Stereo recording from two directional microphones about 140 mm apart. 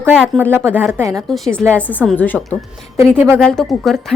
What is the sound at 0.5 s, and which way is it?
Speech, 15° right (ahead or behind).